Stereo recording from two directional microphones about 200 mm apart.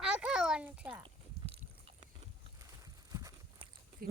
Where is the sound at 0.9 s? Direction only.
25° right (ahead or behind).